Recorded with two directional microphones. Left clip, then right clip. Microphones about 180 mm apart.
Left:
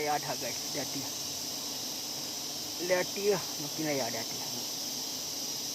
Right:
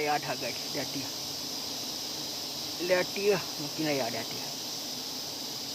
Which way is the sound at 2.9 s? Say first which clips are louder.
Right 2 dB; 15° right (ahead or behind).